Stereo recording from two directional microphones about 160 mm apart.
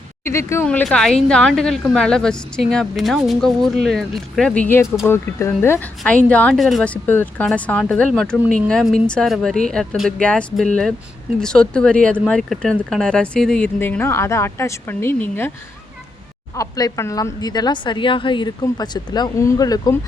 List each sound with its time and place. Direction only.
0.3 s a woman's voice: 15° left (ahead or behind)
16.6 s a woman's voice: 20° left (ahead or behind)